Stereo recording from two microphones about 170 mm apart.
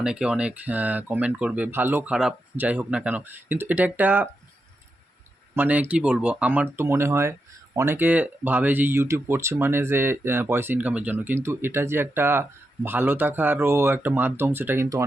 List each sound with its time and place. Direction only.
0.0 s speech: 5° right (ahead or behind)
5.5 s speech: 10° right (ahead or behind)